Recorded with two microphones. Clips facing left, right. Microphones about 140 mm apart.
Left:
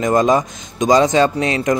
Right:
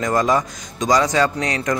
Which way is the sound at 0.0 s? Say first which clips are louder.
Left 4 dB; 20° left (ahead or behind).